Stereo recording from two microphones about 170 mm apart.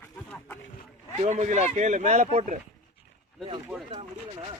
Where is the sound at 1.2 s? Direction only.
45° right (ahead or behind).